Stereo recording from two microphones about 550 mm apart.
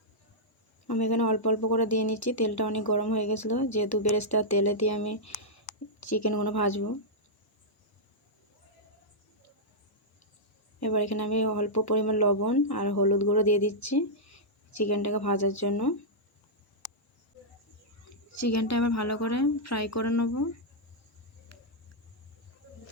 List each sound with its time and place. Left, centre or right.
0.9 s speech: left
1.9 s speech: left
2.5 s speech: left
3.2 s speech: left
4.9 s speech: left
6.0 s speech: left
6.4 s speech: left
10.8 s a sound: left
11.2 s speech: left
14.8 s speech: left
18.3 s speech: left
21.5 s a sound: left